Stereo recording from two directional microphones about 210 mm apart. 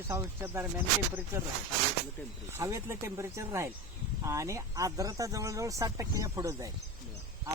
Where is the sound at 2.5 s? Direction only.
15° right (ahead or behind).